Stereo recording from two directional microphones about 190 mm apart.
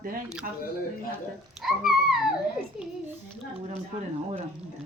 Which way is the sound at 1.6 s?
Centre (ahead or behind).